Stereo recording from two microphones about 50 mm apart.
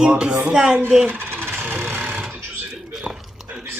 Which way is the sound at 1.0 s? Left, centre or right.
Right.